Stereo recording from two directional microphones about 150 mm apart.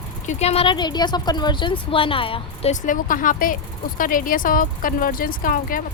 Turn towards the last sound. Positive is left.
turn(degrees=70)  # may be behind; listen again after turning